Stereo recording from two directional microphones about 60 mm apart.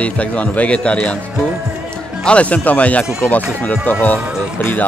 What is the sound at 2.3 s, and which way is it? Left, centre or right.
A man's voice, left.